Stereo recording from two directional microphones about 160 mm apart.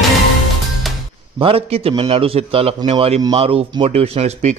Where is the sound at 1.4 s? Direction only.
35° right (ahead or behind).